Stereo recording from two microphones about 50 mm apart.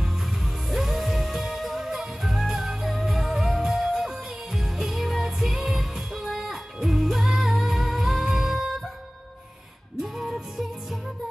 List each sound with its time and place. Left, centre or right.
0.0 s music: centre
10.0 s music: centre